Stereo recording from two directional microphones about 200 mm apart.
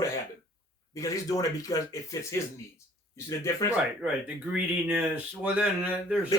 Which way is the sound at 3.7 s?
5° right (ahead or behind).